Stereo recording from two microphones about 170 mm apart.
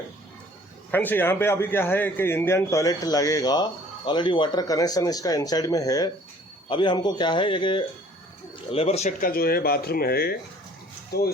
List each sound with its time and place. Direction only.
0.9 s a man's voice: 10° left (ahead or behind); by 11.3 s 70° left (ahead or behind)